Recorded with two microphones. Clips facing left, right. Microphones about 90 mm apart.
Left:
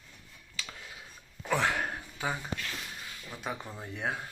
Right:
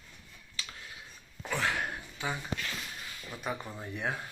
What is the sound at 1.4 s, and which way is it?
Speech, 55° left (ahead or behind).